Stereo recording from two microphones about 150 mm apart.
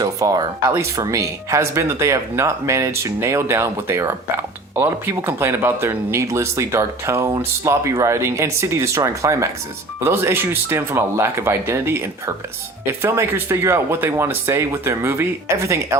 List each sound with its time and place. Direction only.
0.0 s speech: 25° right (ahead or behind)